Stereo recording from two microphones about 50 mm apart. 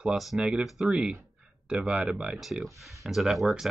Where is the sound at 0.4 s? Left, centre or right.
Centre.